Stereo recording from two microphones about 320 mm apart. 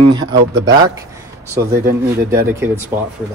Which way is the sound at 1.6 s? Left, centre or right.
Right.